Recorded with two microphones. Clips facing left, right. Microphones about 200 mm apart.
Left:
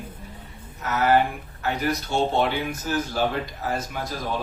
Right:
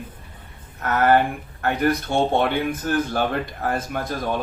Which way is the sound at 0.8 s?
55° right (ahead or behind).